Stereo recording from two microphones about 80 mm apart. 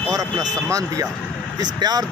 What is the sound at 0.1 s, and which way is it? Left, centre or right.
Speech, right.